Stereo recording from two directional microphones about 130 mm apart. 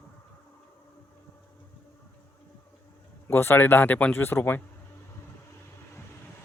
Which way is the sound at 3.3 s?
15° left (ahead or behind).